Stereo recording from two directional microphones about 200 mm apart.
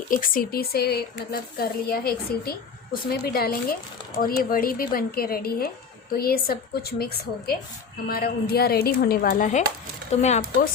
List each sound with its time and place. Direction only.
0.1 s speech: 45° left (ahead or behind)